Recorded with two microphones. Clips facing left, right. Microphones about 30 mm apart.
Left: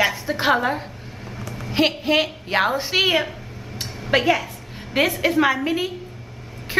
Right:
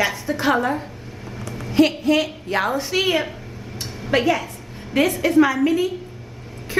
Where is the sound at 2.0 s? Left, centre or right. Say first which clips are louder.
Right 1 dB; left.